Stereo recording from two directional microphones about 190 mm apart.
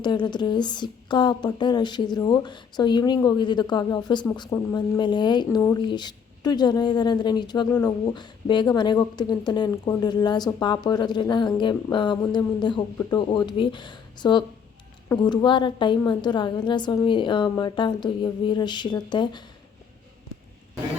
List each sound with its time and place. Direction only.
0.0 s speech: 25° left (ahead or behind)